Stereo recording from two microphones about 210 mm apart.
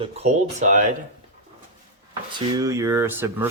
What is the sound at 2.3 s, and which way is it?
Speech, 20° right (ahead or behind).